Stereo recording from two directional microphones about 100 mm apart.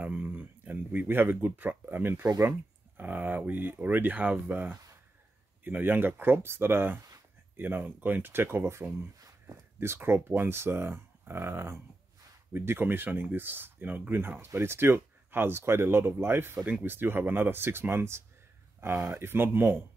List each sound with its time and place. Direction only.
0.0 s a sound: 15° right (ahead or behind)
2.2 s speech: 30° right (ahead or behind)
3.0 s speech: 20° right (ahead or behind)